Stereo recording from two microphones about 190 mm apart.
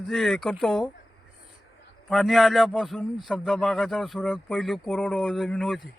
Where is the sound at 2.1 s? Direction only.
Centre (ahead or behind).